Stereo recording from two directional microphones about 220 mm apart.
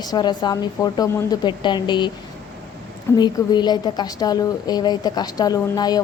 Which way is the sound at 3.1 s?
20° left (ahead or behind).